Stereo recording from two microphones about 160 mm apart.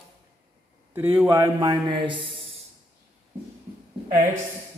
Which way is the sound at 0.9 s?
15° right (ahead or behind).